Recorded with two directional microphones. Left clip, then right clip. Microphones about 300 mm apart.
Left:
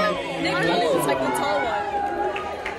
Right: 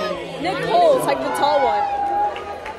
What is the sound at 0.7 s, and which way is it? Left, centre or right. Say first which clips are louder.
Speech: right 10 dB; right.